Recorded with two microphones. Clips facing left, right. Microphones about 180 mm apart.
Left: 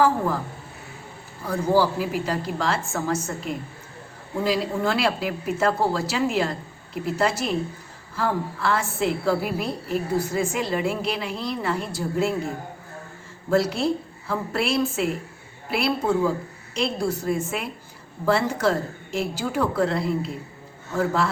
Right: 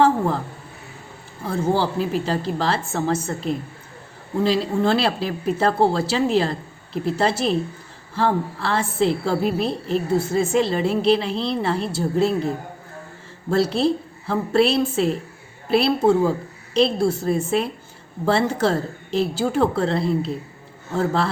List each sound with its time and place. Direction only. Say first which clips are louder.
1.5 s a woman's voice: even; 25° right (ahead or behind)
13.5 s a woman's voice: right 2 dB; 30° right (ahead or behind)